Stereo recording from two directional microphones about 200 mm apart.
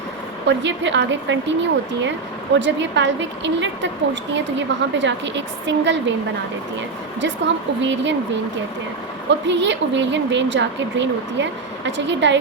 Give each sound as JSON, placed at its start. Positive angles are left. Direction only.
{"t": 0.4, "sound": "a woman's voice", "side_deg": -65}
{"t": 7.2, "sound": "a woman's voice", "side_deg": -65}
{"t": 9.3, "sound": "a woman's voice", "side_deg": -65}